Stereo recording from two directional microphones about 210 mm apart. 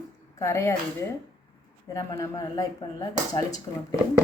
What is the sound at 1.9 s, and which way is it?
Speech, 15° left (ahead or behind).